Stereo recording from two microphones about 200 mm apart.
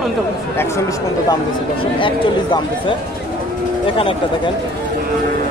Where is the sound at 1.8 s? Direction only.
25° left (ahead or behind).